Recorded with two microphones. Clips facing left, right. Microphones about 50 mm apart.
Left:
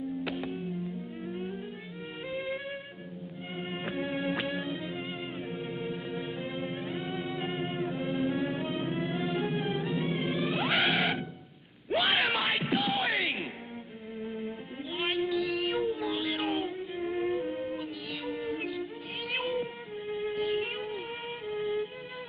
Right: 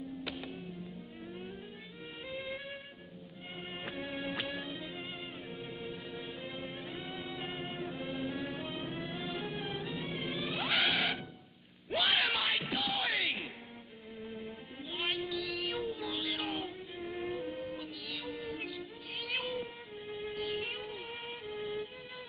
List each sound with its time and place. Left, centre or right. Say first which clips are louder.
0.4 s music: left 9 dB; centre
11.9 s a sound: left 4 dB; centre
12.4 s music: left 5 dB; left
14.2 s music: left 7 dB; centre
16.1 s a sound: left 6 dB; left
16.4 s music: left 7 dB; centre
17.7 s music: left 5 dB; centre
19.4 s music: left 6 dB; centre